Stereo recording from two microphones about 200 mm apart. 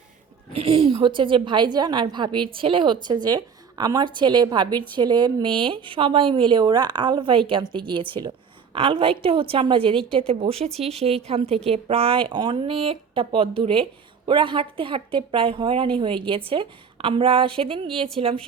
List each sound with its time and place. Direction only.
0.5 s a woman's voice: 30° right (ahead or behind)